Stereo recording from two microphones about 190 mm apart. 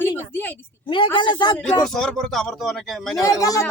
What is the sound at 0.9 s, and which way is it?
Speech, 25° left (ahead or behind).